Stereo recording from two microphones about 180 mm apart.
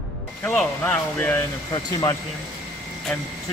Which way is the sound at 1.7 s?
25° left (ahead or behind).